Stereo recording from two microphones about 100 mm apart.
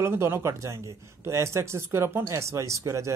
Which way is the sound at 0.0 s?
25° right (ahead or behind).